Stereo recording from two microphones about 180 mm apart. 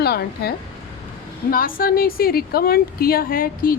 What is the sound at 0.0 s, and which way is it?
Speech, 60° left (ahead or behind).